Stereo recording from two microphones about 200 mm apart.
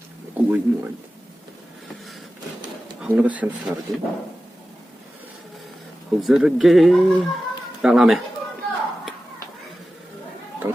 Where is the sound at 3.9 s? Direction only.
20° right (ahead or behind).